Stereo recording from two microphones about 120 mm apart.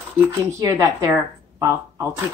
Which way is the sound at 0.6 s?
25° right (ahead or behind).